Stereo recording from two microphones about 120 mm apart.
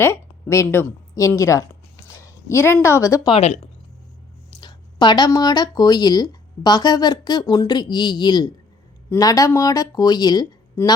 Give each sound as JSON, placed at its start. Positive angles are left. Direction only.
{"t": 0.0, "sound": "speech", "side_deg": 20}
{"t": 2.1, "sound": "a sound", "side_deg": 25}
{"t": 2.8, "sound": "speech", "side_deg": 25}
{"t": 3.4, "sound": "speech", "side_deg": 70}
{"t": 4.6, "sound": "speech", "side_deg": 40}